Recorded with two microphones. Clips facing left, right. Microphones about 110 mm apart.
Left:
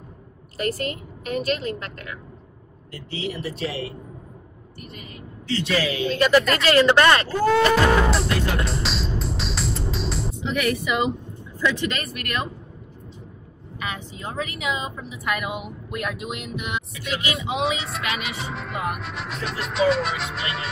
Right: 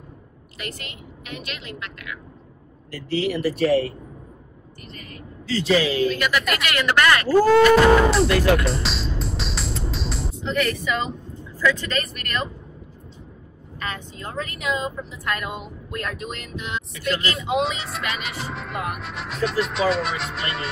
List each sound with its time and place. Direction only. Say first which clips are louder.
0.6 s a woman's voice: left 10 dB; 35° left (ahead or behind)
2.9 s speech: right 7 dB; 70° right (ahead or behind)
5.7 s a man's voice: right 6 dB; 30° right (ahead or behind)
6.0 s speech: left 4 dB; 30° left (ahead or behind)
7.7 s speech: right 4 dB; centre (ahead or behind)
8.6 s music: right 1 dB; centre (ahead or behind)
11.5 s speech: right 2 dB; 20° left (ahead or behind)
13.7 s speech: even; 10° left (ahead or behind)
17.4 s speech: right 1 dB; centre (ahead or behind)